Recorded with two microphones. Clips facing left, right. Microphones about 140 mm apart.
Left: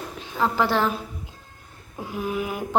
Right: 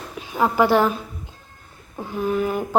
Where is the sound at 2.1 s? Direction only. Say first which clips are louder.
Right 5 dB; 5° left (ahead or behind).